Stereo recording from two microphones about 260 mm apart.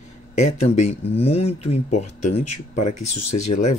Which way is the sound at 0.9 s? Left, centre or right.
Left.